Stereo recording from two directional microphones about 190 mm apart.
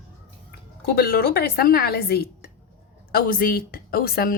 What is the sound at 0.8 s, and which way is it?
A woman's voice, 55° left (ahead or behind).